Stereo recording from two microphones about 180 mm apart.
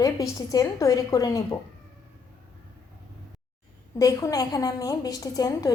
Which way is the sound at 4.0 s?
20° left (ahead or behind).